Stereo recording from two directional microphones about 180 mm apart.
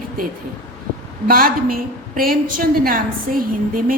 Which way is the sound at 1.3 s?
55° right (ahead or behind).